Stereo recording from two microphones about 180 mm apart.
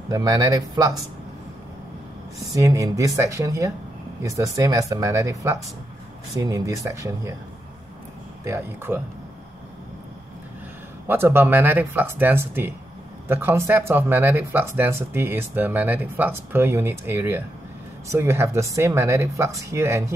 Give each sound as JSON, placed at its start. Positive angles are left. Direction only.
{"t": 0.1, "sound": "speech", "side_deg": -20}
{"t": 2.5, "sound": "speech", "side_deg": -20}
{"t": 8.5, "sound": "speech", "side_deg": -10}
{"t": 11.1, "sound": "speech", "side_deg": -10}